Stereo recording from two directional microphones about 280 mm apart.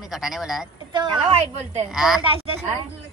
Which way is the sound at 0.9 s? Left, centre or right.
Centre.